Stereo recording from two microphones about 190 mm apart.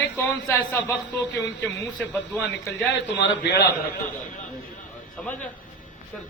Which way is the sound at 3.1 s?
70° left (ahead or behind).